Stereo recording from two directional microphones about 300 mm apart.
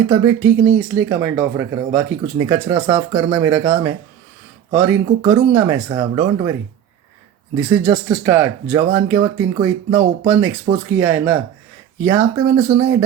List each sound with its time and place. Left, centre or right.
0.1 s speech: centre
0.5 s speech: right
0.8 s speech: centre